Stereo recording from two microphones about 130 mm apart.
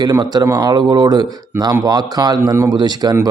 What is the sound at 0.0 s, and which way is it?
Speech, 30° right (ahead or behind).